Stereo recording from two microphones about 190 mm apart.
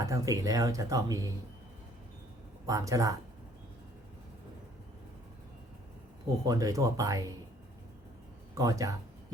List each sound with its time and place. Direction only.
0.0 s speech: 15° right (ahead or behind)
2.6 s speech: 20° right (ahead or behind)
6.4 s speech: 20° right (ahead or behind)
8.5 s speech: 20° right (ahead or behind)